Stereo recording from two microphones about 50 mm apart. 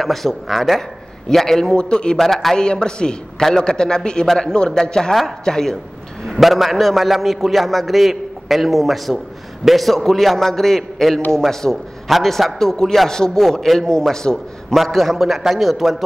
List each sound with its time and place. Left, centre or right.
0.0 s a man's voice: centre
2.1 s a man's voice: centre
2.6 s a man's voice: centre
6.2 s a man's voice: centre